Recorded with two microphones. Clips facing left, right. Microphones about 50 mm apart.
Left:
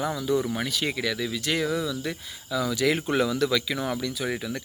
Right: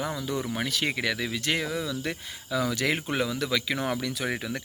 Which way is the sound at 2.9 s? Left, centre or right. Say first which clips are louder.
Left 4 dB; centre.